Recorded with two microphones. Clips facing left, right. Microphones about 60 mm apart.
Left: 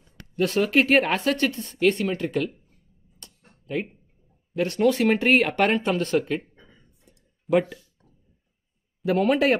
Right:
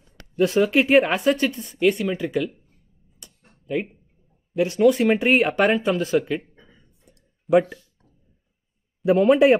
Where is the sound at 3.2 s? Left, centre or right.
Centre.